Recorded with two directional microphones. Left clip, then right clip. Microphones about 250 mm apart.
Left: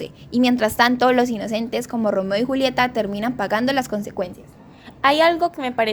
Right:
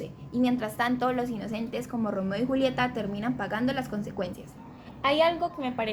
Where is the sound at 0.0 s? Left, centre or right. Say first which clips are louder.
Left 8 dB; left.